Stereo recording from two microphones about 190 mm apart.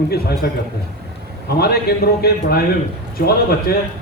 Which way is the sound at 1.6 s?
55° left (ahead or behind).